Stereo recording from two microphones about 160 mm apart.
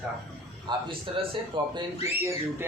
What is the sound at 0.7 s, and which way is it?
Speech, 30° right (ahead or behind).